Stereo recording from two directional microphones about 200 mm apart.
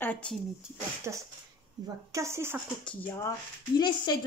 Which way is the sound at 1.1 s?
15° right (ahead or behind).